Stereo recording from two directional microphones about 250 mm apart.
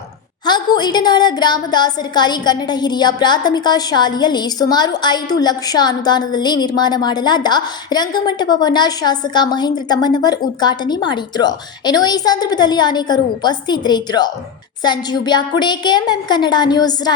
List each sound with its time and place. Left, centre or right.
0.4 s a woman's voice: centre